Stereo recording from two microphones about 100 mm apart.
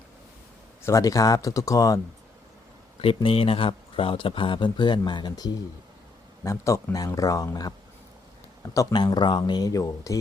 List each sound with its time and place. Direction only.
0.8 s speech: 30° left (ahead or behind)
3.2 s speech: 65° left (ahead or behind); by 5.5 s 45° left (ahead or behind)
6.4 s speech: 30° left (ahead or behind)
8.7 s speech: 35° left (ahead or behind)
9.0 s speech: 50° left (ahead or behind); by 10.2 s 35° left (ahead or behind)